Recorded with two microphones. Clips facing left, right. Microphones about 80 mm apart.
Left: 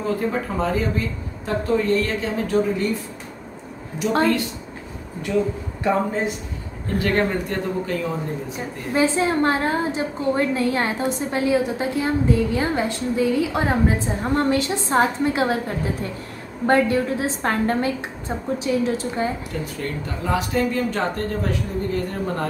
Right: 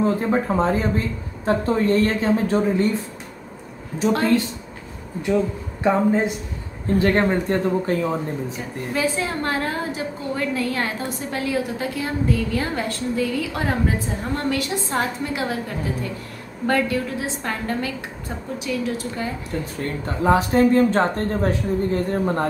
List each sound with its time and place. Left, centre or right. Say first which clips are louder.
0.0 s speech: right 3 dB; right
5.8 s a woman's voice: right 3 dB; right
7.0 s speech: right 2 dB; right
8.9 s a woman's voice: left 5 dB; left
19.5 s speech: right 1 dB; right